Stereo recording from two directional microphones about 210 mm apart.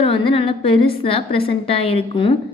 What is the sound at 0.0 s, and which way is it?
A woman's voice, 25° left (ahead or behind).